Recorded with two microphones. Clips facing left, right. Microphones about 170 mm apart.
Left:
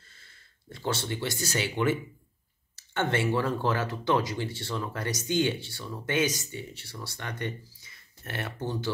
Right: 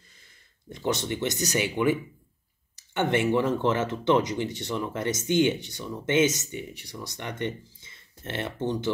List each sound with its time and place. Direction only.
0.1 s speech: 15° right (ahead or behind)